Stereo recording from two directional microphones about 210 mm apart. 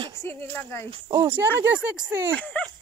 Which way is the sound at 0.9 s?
15° right (ahead or behind).